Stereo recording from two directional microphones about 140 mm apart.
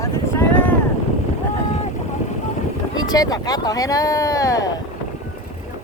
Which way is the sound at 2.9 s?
30° left (ahead or behind).